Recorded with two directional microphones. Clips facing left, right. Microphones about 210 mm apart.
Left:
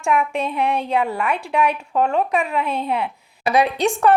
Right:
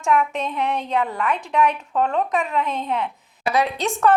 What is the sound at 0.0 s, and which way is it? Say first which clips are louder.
Speech: left 1 dB; 10° left (ahead or behind).